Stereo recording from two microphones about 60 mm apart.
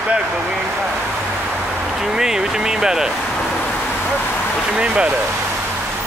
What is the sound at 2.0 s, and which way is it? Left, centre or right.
Speech, centre.